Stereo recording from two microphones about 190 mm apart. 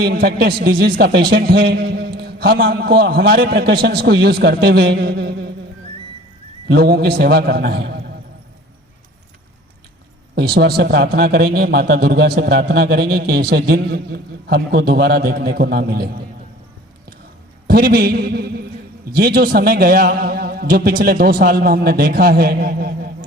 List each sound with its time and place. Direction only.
0.0 s a man's voice: 55° right (ahead or behind)
6.7 s a man's voice: 55° right (ahead or behind)
10.3 s a man's voice: 60° right (ahead or behind)
17.7 s a man's voice: 50° right (ahead or behind)